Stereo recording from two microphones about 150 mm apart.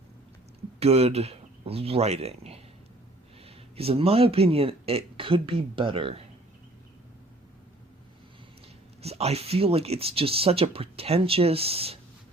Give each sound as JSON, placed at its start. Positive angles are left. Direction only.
{"t": 0.8, "sound": "speech", "side_deg": -45}
{"t": 9.0, "sound": "speech", "side_deg": -45}